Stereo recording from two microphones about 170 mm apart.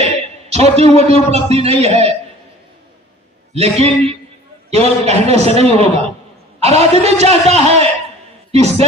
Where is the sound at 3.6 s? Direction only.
40° right (ahead or behind).